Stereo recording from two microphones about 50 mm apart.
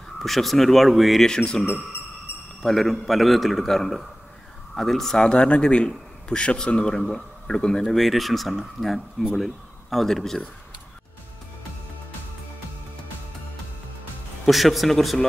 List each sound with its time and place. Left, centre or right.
0.2 s a man's voice: centre
1.2 s speech: centre
2.3 s a sound: left
2.6 s a man's voice: centre
5.2 s speech: left
7.9 s a man's voice: centre
14.4 s a man's voice: centre